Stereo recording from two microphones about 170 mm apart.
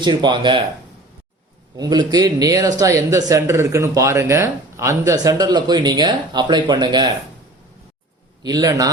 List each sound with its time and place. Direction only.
0.0 s speech: 25° right (ahead or behind)
1.7 s speech: 25° right (ahead or behind)
8.4 s speech: 20° right (ahead or behind)